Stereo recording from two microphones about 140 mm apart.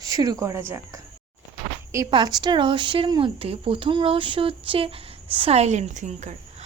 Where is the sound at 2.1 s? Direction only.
30° right (ahead or behind).